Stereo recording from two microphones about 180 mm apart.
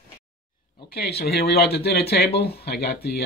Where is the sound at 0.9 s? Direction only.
60° left (ahead or behind).